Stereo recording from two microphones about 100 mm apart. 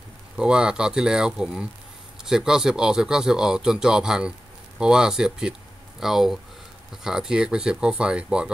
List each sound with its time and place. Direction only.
0.4 s speech: 10° right (ahead or behind)